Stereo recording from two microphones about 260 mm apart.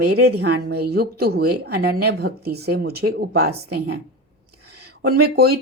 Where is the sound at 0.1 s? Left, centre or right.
Right.